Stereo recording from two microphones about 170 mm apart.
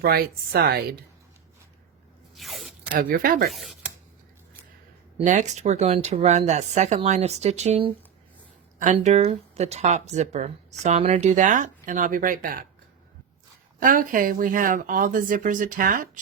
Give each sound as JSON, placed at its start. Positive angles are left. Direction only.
{"t": 0.0, "sound": "a woman's voice", "side_deg": -65}
{"t": 2.3, "sound": "a sound", "side_deg": 0}
{"t": 2.9, "sound": "a woman's voice", "side_deg": -55}
{"t": 3.5, "sound": "a sound", "side_deg": 0}
{"t": 5.2, "sound": "speech", "side_deg": -45}
{"t": 13.7, "sound": "speech", "side_deg": -55}